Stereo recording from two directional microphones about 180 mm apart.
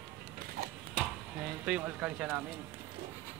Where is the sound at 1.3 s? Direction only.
5° right (ahead or behind).